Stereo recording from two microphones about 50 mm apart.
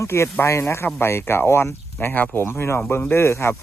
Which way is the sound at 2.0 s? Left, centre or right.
Left.